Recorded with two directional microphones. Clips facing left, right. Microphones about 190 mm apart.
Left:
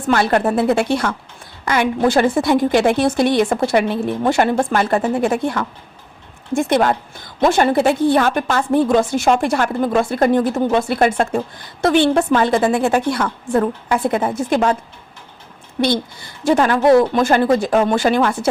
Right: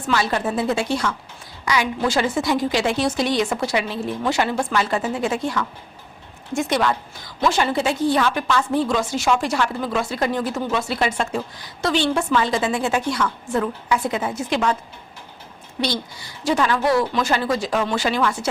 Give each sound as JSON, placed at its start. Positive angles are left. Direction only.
{"t": 0.1, "sound": "a woman's voice", "side_deg": 60}
{"t": 15.8, "sound": "a woman's voice", "side_deg": 55}